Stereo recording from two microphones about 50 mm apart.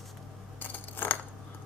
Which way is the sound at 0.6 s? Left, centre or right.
Left.